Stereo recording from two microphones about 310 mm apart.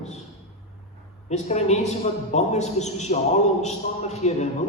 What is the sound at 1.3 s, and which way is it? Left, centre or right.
A man's voice, left.